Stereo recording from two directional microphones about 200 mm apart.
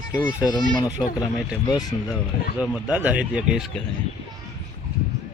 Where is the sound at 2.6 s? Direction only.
5° right (ahead or behind).